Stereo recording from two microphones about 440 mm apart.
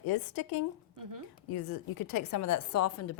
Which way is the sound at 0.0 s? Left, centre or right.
Left.